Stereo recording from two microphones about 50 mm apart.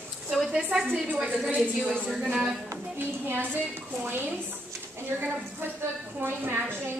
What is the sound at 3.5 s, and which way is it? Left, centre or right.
Speech, right.